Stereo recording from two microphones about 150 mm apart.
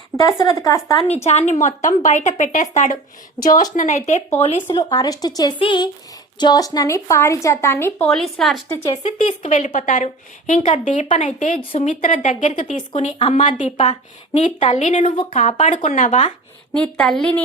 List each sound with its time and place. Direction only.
0.2 s a woman's voice: 25° left (ahead or behind)
1.2 s a woman's voice: 45° left (ahead or behind)
4.8 s a woman's voice: 25° left (ahead or behind)
8.1 s a woman's voice: centre (ahead or behind)
9.0 s a woman's voice: 50° left (ahead or behind)
16.7 s a woman's voice: 5° left (ahead or behind)